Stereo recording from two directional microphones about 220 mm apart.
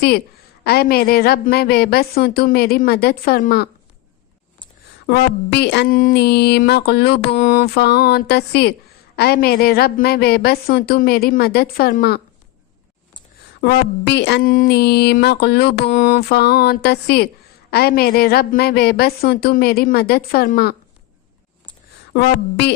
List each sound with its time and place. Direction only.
0.6 s speech: 45° left (ahead or behind)
5.0 s speech: 50° left (ahead or behind)
7.3 s speech: 35° left (ahead or behind)
13.6 s speech: 45° left (ahead or behind)
22.1 s speech: 45° left (ahead or behind)